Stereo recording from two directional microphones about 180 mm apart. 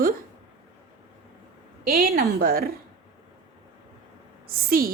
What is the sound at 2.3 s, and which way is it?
Speech, 55° right (ahead or behind).